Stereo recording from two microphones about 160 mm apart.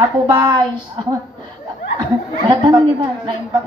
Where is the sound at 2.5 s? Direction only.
30° right (ahead or behind).